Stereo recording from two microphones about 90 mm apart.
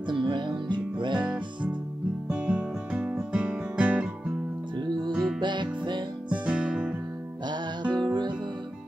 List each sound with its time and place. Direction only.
0.1 s music: 60° right (ahead or behind)
1.2 s music: 10° right (ahead or behind)
2.2 s guitar: 10° right (ahead or behind)
4.7 s music: 55° right (ahead or behind)
6.4 s music: 10° right (ahead or behind)
7.9 s music: 55° right (ahead or behind)